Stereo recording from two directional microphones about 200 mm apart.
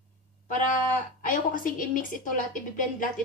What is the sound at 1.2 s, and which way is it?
A woman's voice, 45° left (ahead or behind).